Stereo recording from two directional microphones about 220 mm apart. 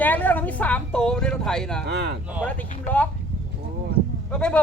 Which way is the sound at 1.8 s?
50° right (ahead or behind).